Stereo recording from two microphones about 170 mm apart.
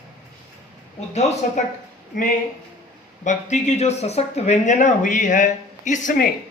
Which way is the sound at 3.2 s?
45° left (ahead or behind).